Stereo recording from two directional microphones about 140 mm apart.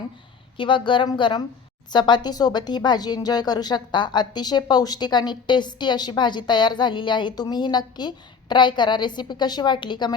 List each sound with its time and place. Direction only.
0.5 s speech: 35° left (ahead or behind)